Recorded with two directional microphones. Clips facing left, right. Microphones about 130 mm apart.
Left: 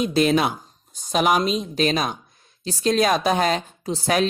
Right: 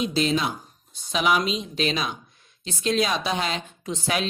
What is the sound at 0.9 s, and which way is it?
A woman's voice, 45° left (ahead or behind).